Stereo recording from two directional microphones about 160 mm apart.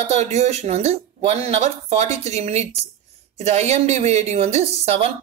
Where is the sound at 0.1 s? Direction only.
45° right (ahead or behind).